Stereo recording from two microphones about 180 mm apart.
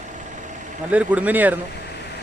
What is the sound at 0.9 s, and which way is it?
Speech, 5° right (ahead or behind).